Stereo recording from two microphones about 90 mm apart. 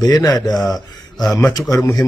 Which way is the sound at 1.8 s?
35° left (ahead or behind).